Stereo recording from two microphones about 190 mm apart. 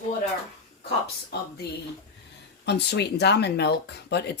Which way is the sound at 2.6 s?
60° left (ahead or behind).